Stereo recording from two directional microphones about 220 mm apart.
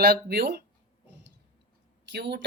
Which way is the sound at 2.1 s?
50° right (ahead or behind).